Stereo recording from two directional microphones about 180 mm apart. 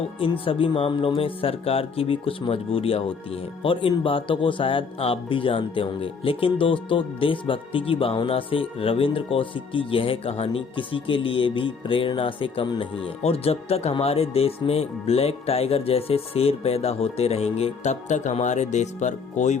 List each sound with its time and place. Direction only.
0.2 s speech: 30° left (ahead or behind)